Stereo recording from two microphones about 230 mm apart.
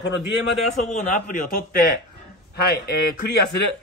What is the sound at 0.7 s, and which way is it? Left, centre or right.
A man's voice, left.